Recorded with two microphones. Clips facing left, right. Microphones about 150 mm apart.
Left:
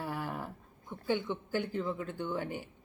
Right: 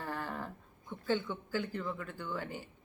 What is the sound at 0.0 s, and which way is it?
Speech, 10° left (ahead or behind).